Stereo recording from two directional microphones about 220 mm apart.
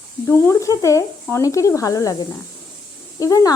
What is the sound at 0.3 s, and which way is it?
Speech, 10° left (ahead or behind).